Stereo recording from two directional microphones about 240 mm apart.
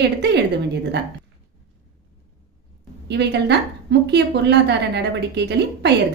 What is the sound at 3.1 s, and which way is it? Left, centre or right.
A woman's voice, right.